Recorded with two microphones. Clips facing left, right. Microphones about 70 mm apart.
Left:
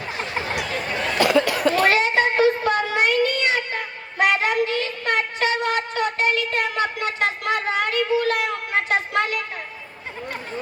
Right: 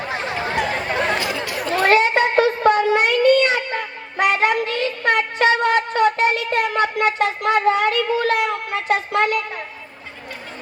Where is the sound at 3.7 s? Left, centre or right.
Right.